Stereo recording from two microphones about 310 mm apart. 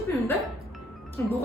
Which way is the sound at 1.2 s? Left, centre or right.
Centre.